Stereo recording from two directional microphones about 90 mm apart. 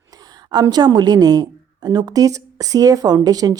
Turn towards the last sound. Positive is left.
turn(degrees=-45)  # may be behind; listen again after turning